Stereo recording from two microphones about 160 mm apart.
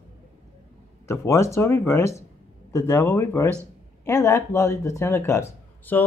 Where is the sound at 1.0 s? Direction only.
15° left (ahead or behind).